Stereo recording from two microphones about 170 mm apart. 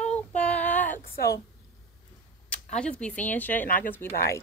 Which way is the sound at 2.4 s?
5° left (ahead or behind).